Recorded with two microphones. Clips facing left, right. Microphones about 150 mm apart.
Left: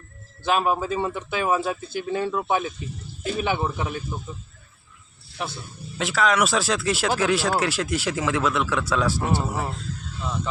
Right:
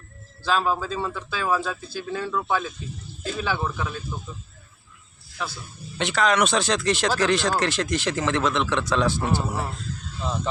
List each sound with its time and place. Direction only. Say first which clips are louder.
0.4 s speech: left 2 dB; 20° left (ahead or behind)
6.0 s speech: even; centre (ahead or behind)